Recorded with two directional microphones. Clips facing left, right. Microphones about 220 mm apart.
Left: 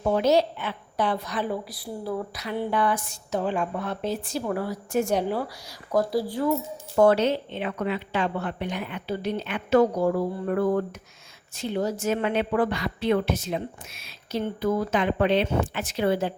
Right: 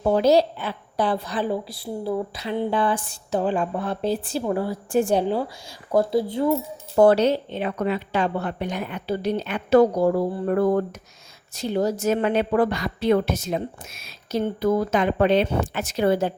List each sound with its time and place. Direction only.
0.0 s a woman's voice: 35° right (ahead or behind)
6.9 s a woman's voice: 35° right (ahead or behind)